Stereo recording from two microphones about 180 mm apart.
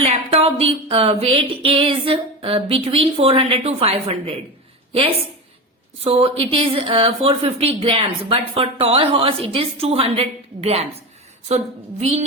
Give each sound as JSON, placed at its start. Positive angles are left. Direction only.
{"t": 0.0, "sound": "a woman's voice", "side_deg": -35}
{"t": 6.0, "sound": "a woman's voice", "side_deg": -35}